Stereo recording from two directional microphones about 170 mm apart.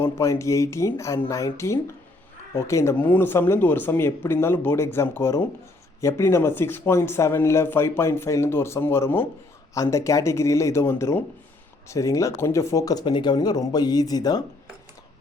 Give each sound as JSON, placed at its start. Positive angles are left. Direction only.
{"t": 0.0, "sound": "speech", "side_deg": 15}